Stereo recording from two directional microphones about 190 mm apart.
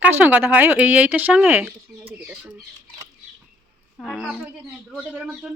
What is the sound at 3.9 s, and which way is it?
A woman's voice, centre (ahead or behind).